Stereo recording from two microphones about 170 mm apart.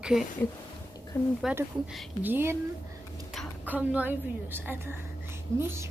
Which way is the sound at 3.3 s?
Centre (ahead or behind).